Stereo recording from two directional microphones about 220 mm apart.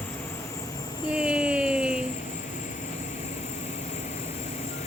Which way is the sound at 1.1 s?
5° right (ahead or behind).